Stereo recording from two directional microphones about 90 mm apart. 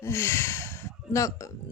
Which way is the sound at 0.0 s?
30° left (ahead or behind).